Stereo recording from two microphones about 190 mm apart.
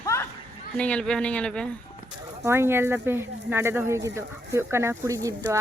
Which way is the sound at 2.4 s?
15° right (ahead or behind).